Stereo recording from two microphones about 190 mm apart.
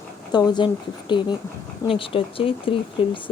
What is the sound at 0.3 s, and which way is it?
A woman's voice, 20° left (ahead or behind).